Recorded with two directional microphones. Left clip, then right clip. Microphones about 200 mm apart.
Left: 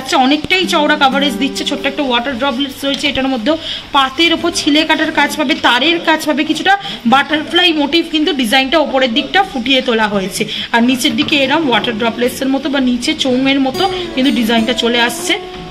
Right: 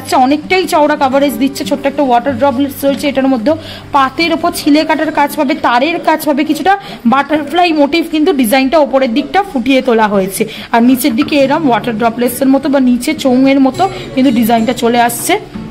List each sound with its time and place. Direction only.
0.1 s a woman's voice: 60° right (ahead or behind)